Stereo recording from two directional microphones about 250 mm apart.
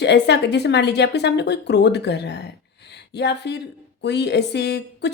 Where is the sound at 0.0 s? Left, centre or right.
Left.